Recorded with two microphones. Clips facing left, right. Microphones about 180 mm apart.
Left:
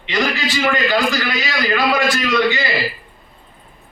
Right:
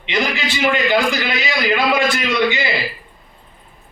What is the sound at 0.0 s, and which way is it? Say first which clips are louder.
A man's voice: left 1 dB; 25° right (ahead or behind).